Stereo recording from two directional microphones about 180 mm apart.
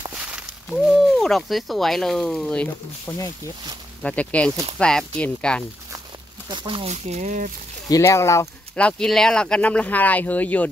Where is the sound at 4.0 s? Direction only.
5° left (ahead or behind).